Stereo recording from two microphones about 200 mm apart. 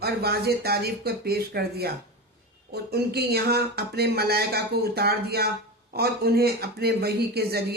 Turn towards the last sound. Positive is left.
turn(degrees=-55)  # may be behind; listen again after turning